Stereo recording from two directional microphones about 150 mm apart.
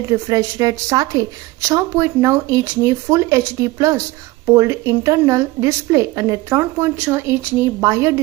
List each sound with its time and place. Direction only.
0.1 s a woman's voice: 20° right (ahead or behind)